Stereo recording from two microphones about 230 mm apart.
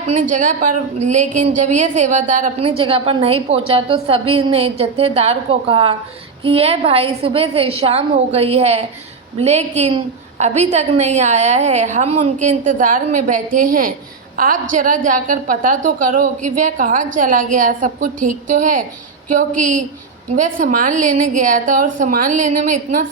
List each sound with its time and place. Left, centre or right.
0.1 s a woman's voice: right